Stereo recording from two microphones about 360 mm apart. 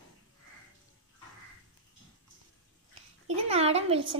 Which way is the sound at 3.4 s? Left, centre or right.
Centre.